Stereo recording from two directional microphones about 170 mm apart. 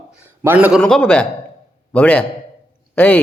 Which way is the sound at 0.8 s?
5° left (ahead or behind).